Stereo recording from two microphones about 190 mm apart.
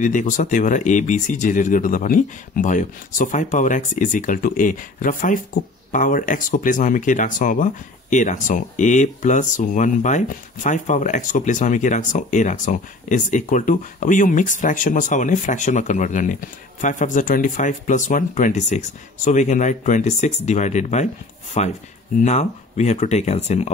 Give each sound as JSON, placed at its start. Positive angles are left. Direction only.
{"t": 0.0, "sound": "speech", "side_deg": 40}